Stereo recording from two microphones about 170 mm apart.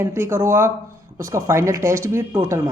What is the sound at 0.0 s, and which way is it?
Speech, 15° right (ahead or behind).